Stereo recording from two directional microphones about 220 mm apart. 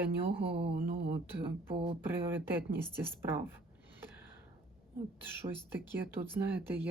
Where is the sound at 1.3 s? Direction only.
10° right (ahead or behind).